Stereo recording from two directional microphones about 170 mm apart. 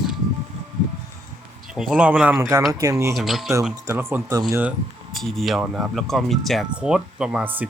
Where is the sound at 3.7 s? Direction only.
15° right (ahead or behind).